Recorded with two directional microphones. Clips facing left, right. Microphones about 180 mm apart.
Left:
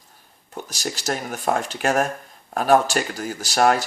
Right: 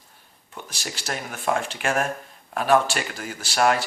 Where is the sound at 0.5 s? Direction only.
40° left (ahead or behind).